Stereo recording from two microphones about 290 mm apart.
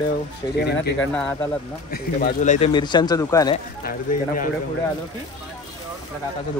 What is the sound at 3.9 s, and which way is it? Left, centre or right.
Speech, left.